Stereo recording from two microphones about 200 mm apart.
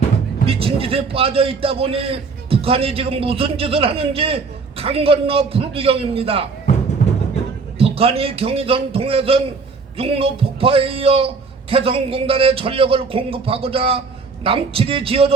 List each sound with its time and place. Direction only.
0.4 s a man's voice: 30° right (ahead or behind)
7.8 s a man's voice: 30° right (ahead or behind)